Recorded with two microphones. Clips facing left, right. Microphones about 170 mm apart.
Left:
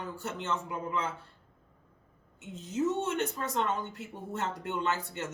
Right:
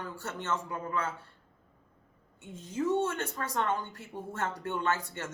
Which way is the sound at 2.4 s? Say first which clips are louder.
Left 2 dB; 20° left (ahead or behind).